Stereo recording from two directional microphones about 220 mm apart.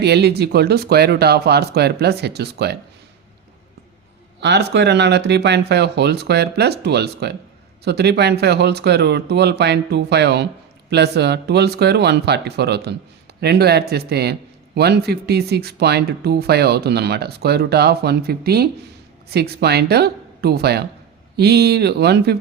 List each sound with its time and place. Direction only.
0.0 s speech: 50° right (ahead or behind)
4.4 s speech: 50° right (ahead or behind)